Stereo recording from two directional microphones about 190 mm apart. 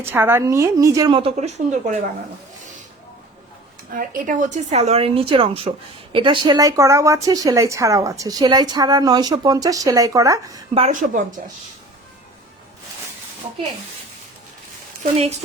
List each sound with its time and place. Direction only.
0.0 s a woman's voice: 10° right (ahead or behind); by 2.0 s 35° right (ahead or behind)
3.9 s a woman's voice: 45° right (ahead or behind); by 10.6 s 15° right (ahead or behind)
10.8 s a woman's voice: 40° right (ahead or behind)
15.1 s a woman's voice: 35° right (ahead or behind)